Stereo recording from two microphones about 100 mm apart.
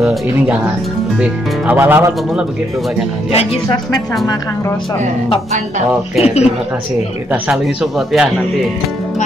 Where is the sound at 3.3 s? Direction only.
90° left.